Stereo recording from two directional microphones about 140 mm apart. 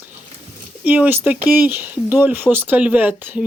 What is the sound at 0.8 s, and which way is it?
Speech, 10° right (ahead or behind).